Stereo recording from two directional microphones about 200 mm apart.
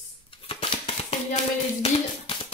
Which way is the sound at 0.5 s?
30° left (ahead or behind).